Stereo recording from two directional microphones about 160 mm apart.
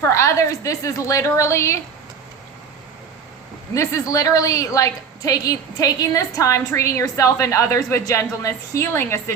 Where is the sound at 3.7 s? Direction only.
20° left (ahead or behind).